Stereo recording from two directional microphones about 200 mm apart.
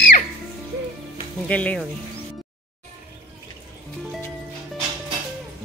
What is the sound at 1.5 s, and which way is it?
Speech, 5° left (ahead or behind).